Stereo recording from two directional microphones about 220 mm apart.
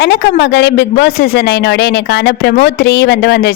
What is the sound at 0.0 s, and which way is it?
A woman's voice, 50° left (ahead or behind).